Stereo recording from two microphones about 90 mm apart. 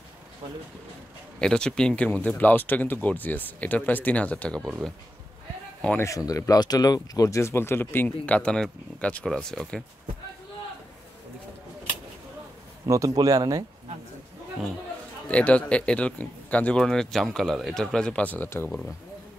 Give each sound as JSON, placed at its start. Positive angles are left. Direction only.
{"t": 1.4, "sound": "speech", "side_deg": 10}
{"t": 5.9, "sound": "speech", "side_deg": 35}
{"t": 12.8, "sound": "speech", "side_deg": -40}
{"t": 15.2, "sound": "speech", "side_deg": 15}